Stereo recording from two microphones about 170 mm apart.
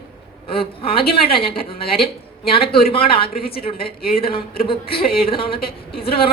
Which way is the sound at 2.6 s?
65° left (ahead or behind).